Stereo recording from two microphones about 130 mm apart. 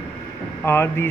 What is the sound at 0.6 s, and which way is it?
Speech, 20° left (ahead or behind).